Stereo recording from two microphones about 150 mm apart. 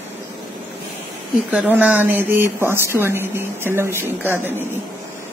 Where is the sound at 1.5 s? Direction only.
10° right (ahead or behind).